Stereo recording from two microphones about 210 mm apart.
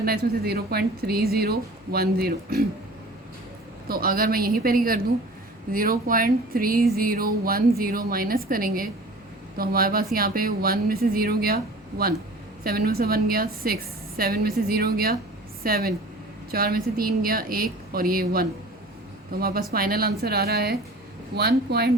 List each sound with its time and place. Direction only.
0.0 s speech: 45° right (ahead or behind)
3.8 s speech: 45° right (ahead or behind)